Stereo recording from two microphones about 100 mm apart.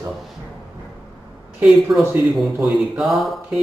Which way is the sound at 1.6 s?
Centre (ahead or behind).